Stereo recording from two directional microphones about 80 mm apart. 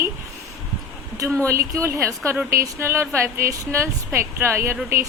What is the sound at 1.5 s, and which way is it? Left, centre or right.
A woman's voice, right.